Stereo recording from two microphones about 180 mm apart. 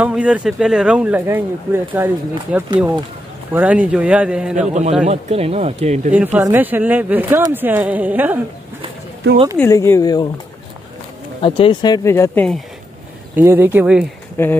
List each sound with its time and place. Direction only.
0.0 s speech: 5° right (ahead or behind)
4.6 s speech: 40° right (ahead or behind)
6.1 s speech: 10° right (ahead or behind)
9.6 s speech: 15° left (ahead or behind)
11.4 s speech: 30° left (ahead or behind)
13.4 s speech: 10° right (ahead or behind)
14.3 s speech: 10° left (ahead or behind)